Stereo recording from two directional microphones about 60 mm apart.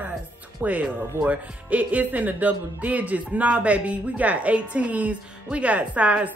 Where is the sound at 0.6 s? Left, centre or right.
Right.